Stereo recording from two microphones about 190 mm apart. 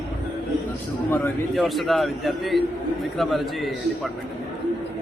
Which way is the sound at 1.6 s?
Centre (ahead or behind).